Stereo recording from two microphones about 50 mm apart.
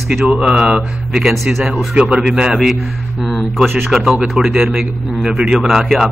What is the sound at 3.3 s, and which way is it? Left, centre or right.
Speech, centre.